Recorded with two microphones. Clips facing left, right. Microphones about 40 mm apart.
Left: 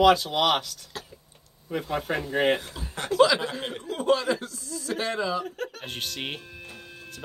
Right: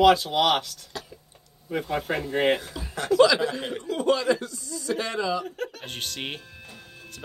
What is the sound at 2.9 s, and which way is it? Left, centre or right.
Speech, left.